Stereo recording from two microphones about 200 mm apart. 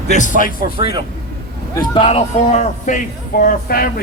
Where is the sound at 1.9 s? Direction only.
30° left (ahead or behind).